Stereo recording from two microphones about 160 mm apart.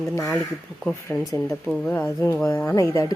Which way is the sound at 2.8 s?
20° left (ahead or behind).